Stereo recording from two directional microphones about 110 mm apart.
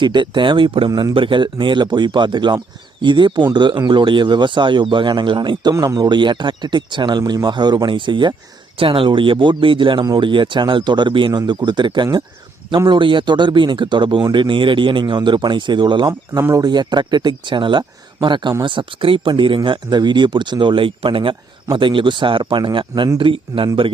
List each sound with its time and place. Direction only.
0.0 s speech: 45° right (ahead or behind)
0.9 s a man's voice: 35° right (ahead or behind)
1.1 s speech: 50° right (ahead or behind)
5.7 s speech: 35° right (ahead or behind)
16.4 s speech: 25° right (ahead or behind)
16.6 s speech: 40° right (ahead or behind)